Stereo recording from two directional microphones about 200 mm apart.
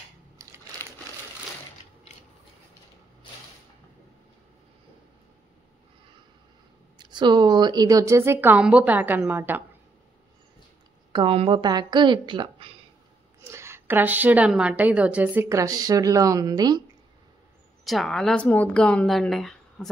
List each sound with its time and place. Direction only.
0.4 s crumpling: 15° right (ahead or behind)
7.0 s a woman's voice: 20° right (ahead or behind)
11.1 s a woman's voice: 25° right (ahead or behind)
13.5 s a woman's voice: 15° right (ahead or behind)
17.8 s speech: centre (ahead or behind)